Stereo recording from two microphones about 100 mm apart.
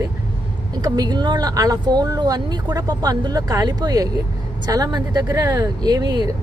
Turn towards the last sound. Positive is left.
turn(degrees=-45)  # may be behind; listen again after turning